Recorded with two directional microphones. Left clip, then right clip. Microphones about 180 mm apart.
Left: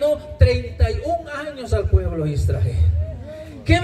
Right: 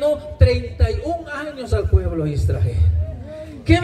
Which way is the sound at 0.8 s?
20° left (ahead or behind).